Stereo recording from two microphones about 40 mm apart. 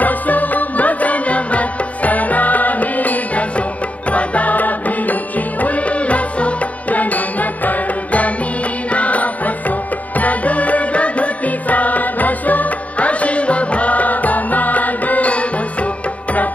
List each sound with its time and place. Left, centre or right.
0.0 s music: left